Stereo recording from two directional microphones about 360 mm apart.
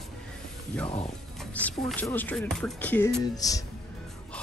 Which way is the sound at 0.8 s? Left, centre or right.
Centre.